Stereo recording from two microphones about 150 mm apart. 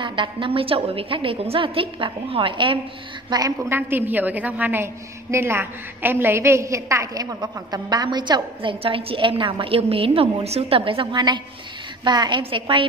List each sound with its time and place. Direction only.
0.0 s a woman's voice: 35° right (ahead or behind)
3.3 s a woman's voice: 25° right (ahead or behind)